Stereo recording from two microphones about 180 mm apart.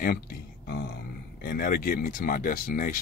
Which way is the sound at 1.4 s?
55° left (ahead or behind).